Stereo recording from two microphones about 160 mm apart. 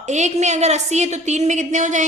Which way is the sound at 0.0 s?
45° right (ahead or behind).